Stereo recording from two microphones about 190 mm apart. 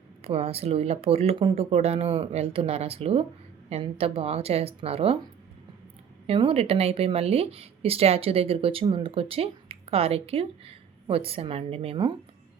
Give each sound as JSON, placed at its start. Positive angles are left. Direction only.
{"t": 0.2, "sound": "speech", "side_deg": -30}
{"t": 6.2, "sound": "speech", "side_deg": -30}